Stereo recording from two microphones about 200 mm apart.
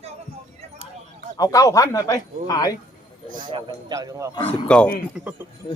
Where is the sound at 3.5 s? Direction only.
20° right (ahead or behind).